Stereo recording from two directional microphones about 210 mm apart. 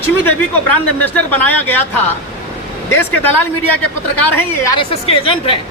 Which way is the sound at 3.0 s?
10° left (ahead or behind).